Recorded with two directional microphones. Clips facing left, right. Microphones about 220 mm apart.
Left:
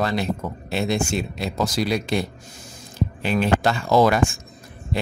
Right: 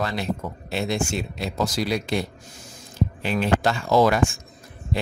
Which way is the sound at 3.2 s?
55° left (ahead or behind).